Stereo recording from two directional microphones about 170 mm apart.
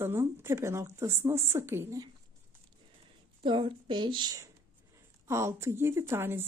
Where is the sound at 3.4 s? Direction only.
30° right (ahead or behind).